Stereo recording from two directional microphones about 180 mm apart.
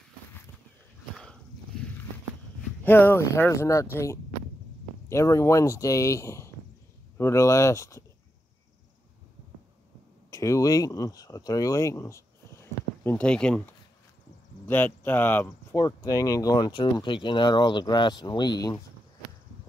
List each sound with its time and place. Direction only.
1.1 s a sound: 5° left (ahead or behind)
2.8 s speech: 10° left (ahead or behind)
10.3 s speech: 15° left (ahead or behind)